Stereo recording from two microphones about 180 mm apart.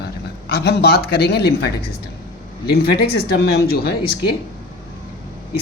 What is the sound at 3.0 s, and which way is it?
Speech, 60° left (ahead or behind).